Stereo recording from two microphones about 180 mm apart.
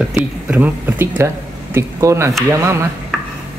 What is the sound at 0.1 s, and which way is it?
Speech, 10° right (ahead or behind).